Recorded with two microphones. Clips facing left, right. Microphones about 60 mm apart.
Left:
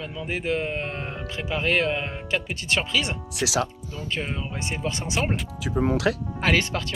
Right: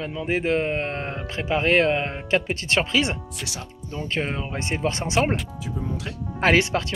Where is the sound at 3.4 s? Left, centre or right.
Left.